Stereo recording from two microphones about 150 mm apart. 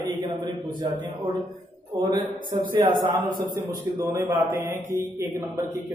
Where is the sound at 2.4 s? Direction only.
70° right (ahead or behind).